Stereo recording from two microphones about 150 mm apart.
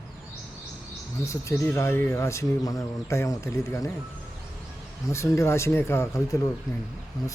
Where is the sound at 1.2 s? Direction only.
20° left (ahead or behind).